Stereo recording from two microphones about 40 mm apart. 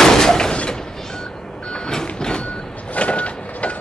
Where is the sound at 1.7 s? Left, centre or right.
Centre.